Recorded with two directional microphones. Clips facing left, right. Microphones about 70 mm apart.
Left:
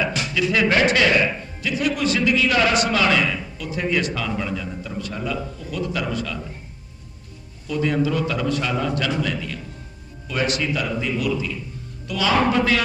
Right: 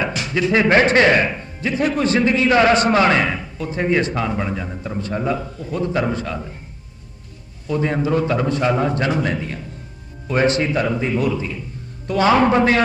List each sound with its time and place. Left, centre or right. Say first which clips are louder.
0.0 s a man's voice: right 2 dB; right
7.7 s a man's voice: right 2 dB; right